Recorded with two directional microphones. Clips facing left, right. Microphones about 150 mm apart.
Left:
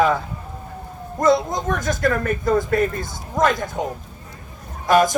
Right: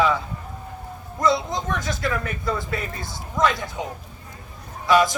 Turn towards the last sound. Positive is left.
turn(degrees=50)  # may be behind; listen again after turning